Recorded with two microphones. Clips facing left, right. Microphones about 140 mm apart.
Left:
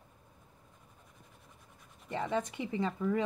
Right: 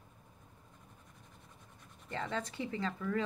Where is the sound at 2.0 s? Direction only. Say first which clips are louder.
Left 5 dB; 15° left (ahead or behind).